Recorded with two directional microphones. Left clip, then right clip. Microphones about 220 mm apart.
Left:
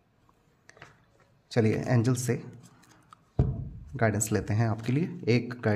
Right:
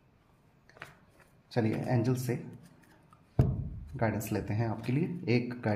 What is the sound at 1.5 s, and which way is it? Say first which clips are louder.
Speech: left 5 dB; 45° left (ahead or behind).